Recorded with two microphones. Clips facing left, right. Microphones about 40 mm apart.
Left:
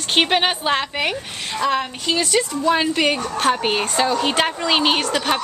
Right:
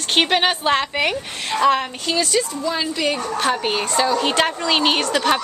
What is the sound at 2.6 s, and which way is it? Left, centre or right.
Speech, left.